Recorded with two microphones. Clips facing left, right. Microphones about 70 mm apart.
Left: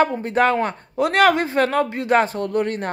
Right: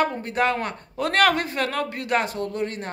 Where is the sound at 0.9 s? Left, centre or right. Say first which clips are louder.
Left 4 dB; centre; by 2.4 s left.